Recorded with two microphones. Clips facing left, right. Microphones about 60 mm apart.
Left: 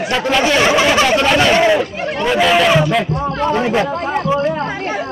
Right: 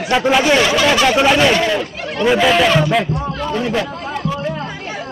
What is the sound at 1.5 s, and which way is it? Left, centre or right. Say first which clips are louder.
Speech: left 4 dB; centre.